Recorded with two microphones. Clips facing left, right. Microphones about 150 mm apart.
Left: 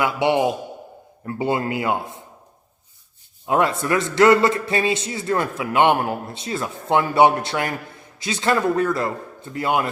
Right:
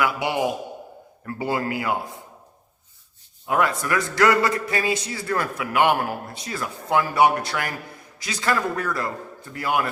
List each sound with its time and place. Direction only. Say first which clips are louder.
0.0 s a man's voice: left 4 dB; 25° left (ahead or behind)
3.4 s a man's voice: left 3 dB; 25° left (ahead or behind)